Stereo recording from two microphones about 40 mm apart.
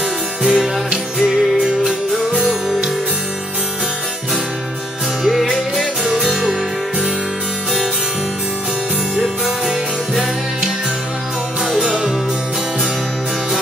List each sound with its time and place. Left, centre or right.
0.4 s music: right
5.2 s music: centre